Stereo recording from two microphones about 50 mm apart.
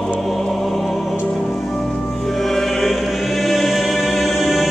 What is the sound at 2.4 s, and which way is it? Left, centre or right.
Music, centre.